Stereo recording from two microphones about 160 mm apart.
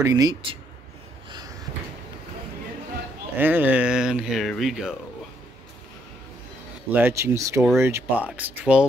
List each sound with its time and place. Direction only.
0.0 s speech: 25° right (ahead or behind)
1.3 s a sound: 25° right (ahead or behind)
3.3 s speech: 10° right (ahead or behind)
6.9 s speech: 10° right (ahead or behind)